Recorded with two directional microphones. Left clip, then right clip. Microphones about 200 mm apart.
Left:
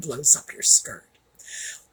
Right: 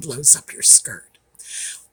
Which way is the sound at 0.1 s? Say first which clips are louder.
Right 2 dB; 40° right (ahead or behind).